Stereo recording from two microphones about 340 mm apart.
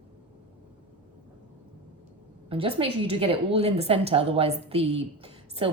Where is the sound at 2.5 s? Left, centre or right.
Centre.